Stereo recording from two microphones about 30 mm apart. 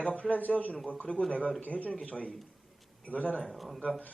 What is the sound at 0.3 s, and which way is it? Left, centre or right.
Speech, left.